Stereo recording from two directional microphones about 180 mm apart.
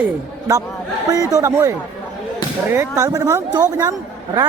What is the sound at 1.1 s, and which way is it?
Speech, 20° right (ahead or behind).